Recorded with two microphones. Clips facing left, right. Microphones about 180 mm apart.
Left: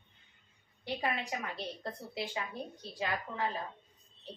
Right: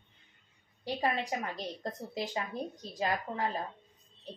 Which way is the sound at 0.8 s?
40° right (ahead or behind).